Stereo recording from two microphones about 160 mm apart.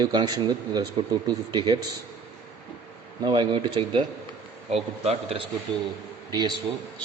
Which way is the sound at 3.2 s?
30° right (ahead or behind).